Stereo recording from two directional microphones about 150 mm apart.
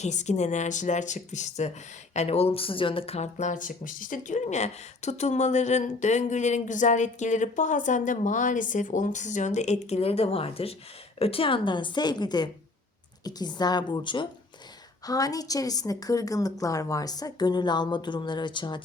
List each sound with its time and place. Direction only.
0.0 s a woman's voice: 50° left (ahead or behind); by 18.8 s 30° left (ahead or behind)